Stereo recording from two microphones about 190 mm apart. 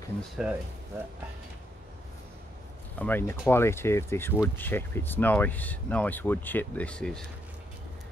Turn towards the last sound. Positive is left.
turn(degrees=5)  # may be behind; listen again after turning